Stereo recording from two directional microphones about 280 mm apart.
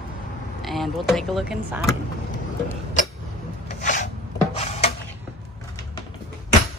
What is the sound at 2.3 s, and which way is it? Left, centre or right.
Vehicle, left.